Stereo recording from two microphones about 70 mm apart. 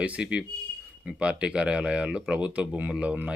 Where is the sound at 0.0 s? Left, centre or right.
Centre.